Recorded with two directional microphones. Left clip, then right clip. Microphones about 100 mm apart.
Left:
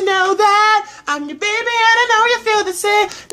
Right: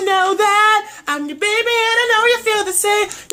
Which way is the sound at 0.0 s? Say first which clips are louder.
Left 1 dB; 5° right (ahead or behind).